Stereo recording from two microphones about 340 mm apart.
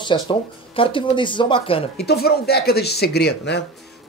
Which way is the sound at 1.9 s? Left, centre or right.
Left.